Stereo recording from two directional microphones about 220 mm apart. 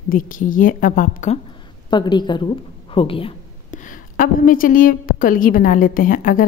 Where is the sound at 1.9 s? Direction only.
20° left (ahead or behind).